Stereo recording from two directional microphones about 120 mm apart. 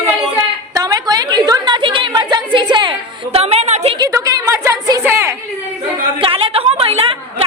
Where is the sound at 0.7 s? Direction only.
30° right (ahead or behind).